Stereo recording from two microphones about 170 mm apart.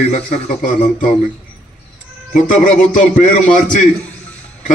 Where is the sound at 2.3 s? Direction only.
50° left (ahead or behind).